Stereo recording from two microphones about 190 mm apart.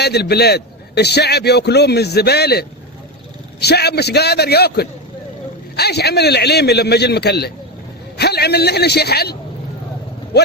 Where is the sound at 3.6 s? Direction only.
60° left (ahead or behind).